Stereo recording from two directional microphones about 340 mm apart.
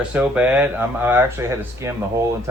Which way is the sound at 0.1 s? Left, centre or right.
Centre.